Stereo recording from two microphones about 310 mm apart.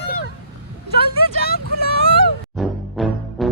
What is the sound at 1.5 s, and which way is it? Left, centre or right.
Vehicle, left.